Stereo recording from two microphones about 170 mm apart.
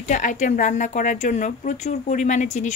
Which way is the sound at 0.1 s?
50° left (ahead or behind).